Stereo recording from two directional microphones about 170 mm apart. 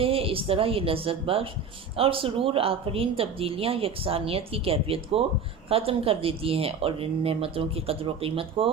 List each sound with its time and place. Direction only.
0.0 s a woman's voice: 35° right (ahead or behind)